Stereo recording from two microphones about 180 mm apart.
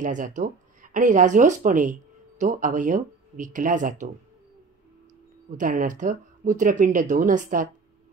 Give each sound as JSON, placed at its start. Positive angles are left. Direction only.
{"t": 0.0, "sound": "speech", "side_deg": -45}
{"t": 5.6, "sound": "speech", "side_deg": -45}